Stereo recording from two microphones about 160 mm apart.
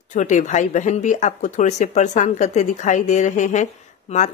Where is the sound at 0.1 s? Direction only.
50° left (ahead or behind).